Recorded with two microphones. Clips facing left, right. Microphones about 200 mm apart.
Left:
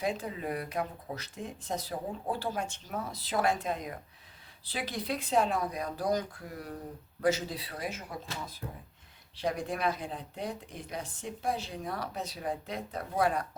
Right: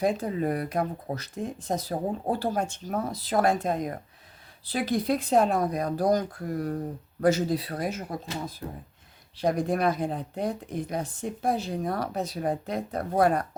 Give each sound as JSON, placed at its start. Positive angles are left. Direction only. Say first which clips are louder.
{"t": 0.0, "sound": "speech", "louder": "right 8 dB", "side_deg": -45}
{"t": 9.4, "sound": "speech", "louder": "right 7 dB", "side_deg": -45}